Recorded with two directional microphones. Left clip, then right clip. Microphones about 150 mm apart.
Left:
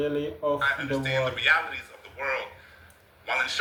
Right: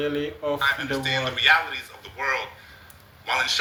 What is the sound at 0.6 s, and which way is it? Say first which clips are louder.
A man's voice: right 3 dB; 40° right (ahead or behind).